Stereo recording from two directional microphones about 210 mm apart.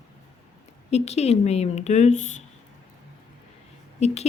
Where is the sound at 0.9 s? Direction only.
30° left (ahead or behind).